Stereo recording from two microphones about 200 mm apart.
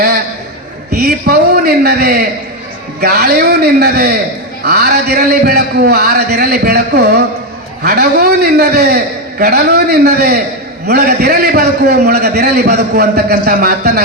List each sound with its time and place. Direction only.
0.9 s a man's voice: 55° right (ahead or behind)